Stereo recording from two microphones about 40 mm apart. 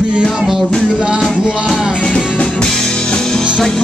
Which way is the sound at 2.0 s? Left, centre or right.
Left.